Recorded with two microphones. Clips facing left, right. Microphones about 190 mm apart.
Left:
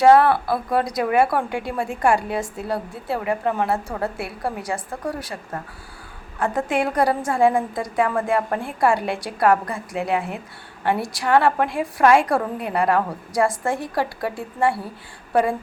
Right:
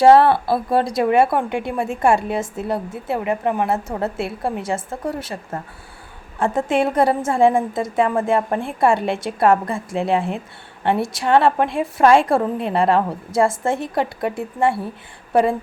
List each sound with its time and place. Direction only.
0.0 s speech: 30° right (ahead or behind)